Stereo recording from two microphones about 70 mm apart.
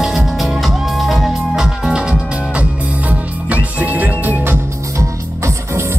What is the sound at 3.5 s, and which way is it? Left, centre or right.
Music, right.